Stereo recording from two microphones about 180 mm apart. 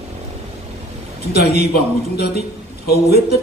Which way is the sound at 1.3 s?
60° left (ahead or behind).